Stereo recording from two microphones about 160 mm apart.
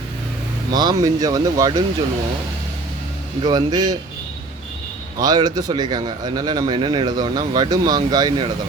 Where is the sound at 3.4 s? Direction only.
25° right (ahead or behind).